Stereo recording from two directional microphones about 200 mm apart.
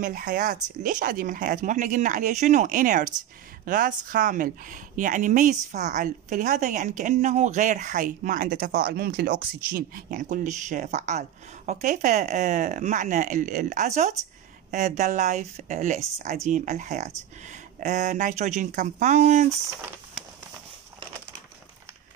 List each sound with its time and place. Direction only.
0.0 s a woman's voice: 45° right (ahead or behind)